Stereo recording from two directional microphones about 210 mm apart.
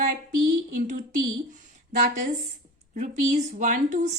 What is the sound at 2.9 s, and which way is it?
A woman's voice, 35° right (ahead or behind).